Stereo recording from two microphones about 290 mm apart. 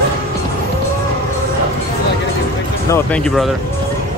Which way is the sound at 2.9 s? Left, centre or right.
Centre.